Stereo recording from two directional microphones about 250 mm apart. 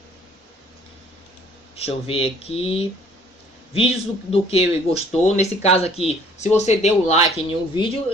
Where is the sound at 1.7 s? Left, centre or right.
Left.